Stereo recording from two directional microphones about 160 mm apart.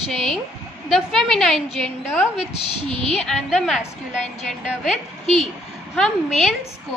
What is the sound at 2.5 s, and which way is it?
Speech, 40° left (ahead or behind).